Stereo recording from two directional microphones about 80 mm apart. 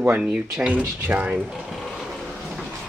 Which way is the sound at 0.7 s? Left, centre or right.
Centre.